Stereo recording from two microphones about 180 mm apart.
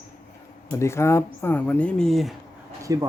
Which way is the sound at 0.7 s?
15° left (ahead or behind).